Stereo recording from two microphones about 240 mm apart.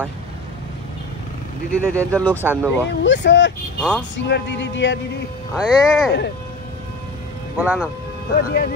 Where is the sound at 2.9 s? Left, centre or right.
Left.